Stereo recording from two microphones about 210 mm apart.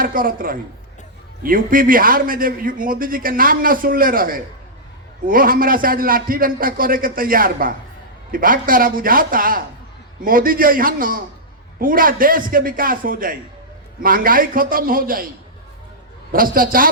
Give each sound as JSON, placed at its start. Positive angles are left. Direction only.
{"t": 0.0, "sound": "a man's voice", "side_deg": -40}
{"t": 16.3, "sound": "a man's voice", "side_deg": -40}